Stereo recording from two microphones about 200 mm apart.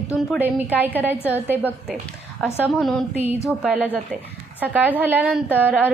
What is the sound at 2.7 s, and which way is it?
A woman's voice, 5° left (ahead or behind).